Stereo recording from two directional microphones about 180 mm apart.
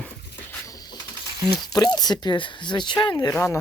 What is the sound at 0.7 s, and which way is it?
Printer, 20° left (ahead or behind).